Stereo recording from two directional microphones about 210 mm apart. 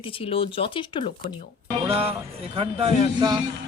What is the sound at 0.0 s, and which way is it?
Speech, 25° left (ahead or behind).